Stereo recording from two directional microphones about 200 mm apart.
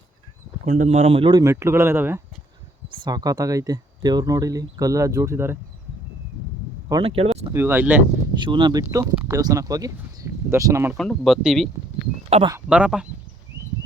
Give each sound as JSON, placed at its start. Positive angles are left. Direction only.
{"t": 0.6, "sound": "speech", "side_deg": -40}
{"t": 6.8, "sound": "a sound", "side_deg": -25}
{"t": 7.5, "sound": "speech", "side_deg": -10}
{"t": 8.4, "sound": "speech", "side_deg": -25}
{"t": 10.9, "sound": "speech", "side_deg": 0}
{"t": 12.3, "sound": "speech", "side_deg": -30}
{"t": 12.5, "sound": "speech", "side_deg": -5}